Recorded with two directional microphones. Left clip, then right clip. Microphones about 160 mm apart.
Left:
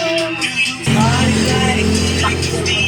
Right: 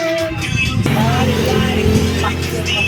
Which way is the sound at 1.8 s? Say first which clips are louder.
Even; 35° left (ahead or behind).